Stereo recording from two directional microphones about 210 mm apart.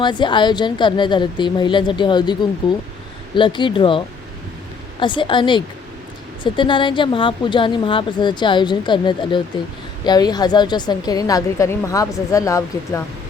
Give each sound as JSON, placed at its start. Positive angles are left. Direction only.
{"t": 0.0, "sound": "a woman's voice", "side_deg": 20}